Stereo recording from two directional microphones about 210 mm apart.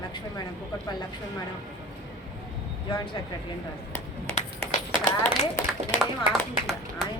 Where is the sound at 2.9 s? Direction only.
20° left (ahead or behind).